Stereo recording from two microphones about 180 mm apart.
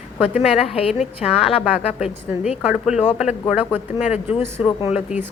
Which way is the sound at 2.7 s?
5° right (ahead or behind).